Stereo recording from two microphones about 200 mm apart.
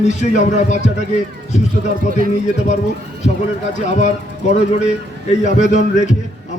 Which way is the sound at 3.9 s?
35° left (ahead or behind).